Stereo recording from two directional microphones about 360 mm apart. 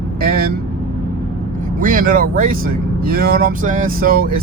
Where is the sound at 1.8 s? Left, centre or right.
Right.